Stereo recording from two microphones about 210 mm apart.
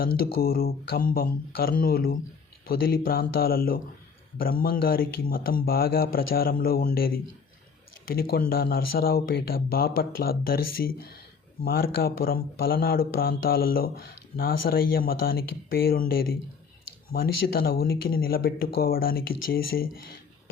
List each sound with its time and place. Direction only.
0.0 s speech: 45° left (ahead or behind)
17.7 s speech: 45° left (ahead or behind)